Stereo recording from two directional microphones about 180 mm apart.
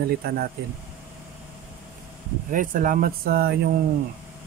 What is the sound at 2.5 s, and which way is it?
Speech, 45° right (ahead or behind).